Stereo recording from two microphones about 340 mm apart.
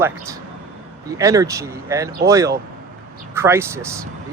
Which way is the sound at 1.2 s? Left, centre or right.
Centre.